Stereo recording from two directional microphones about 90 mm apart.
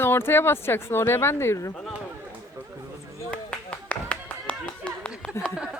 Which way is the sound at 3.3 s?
15° left (ahead or behind).